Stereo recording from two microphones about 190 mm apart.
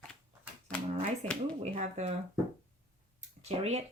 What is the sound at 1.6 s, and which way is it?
Speech, 35° right (ahead or behind).